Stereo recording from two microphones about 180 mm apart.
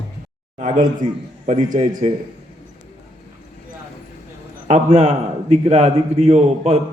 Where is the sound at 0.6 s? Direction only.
45° right (ahead or behind).